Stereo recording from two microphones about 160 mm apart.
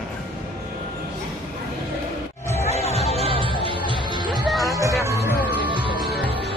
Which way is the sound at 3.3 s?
35° right (ahead or behind).